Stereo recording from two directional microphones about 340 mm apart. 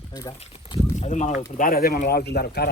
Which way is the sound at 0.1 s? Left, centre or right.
Centre.